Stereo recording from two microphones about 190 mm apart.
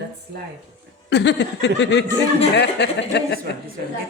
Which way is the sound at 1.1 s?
65° left (ahead or behind).